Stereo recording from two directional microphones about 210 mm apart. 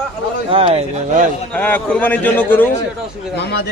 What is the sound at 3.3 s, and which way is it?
Speech, 55° left (ahead or behind).